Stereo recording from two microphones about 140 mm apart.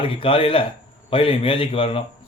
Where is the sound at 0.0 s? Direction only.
40° left (ahead or behind).